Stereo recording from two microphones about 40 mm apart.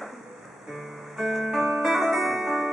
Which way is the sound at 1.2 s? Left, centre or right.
Centre.